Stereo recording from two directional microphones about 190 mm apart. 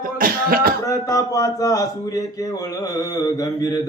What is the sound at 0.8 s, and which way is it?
A man's voice, 20° left (ahead or behind).